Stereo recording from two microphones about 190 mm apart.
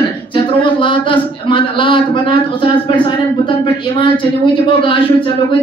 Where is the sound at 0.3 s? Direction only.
25° left (ahead or behind).